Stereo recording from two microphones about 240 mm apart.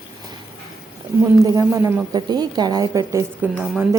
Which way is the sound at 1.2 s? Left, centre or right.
Centre.